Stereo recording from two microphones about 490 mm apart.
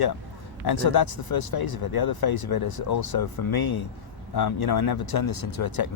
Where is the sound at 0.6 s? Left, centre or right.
Left.